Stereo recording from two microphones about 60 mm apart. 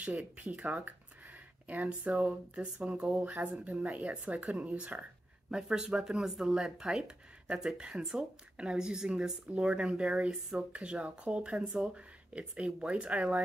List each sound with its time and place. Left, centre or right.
0.0 s speech: right
5.5 s speech: centre